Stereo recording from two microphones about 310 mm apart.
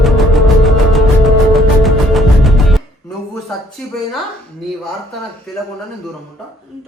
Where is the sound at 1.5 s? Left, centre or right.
Centre.